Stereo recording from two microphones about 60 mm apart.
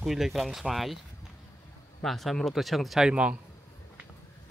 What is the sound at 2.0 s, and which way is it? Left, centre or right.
Speech, centre.